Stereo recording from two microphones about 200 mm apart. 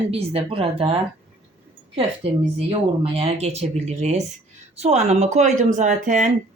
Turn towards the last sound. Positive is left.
turn(degrees=-40)  # may be behind; listen again after turning